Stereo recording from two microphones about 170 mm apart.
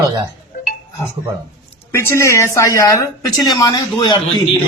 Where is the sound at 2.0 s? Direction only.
15° left (ahead or behind).